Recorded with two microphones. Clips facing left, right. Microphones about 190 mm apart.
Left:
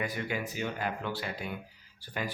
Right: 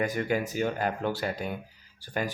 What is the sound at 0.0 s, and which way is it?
Speech, 45° right (ahead or behind).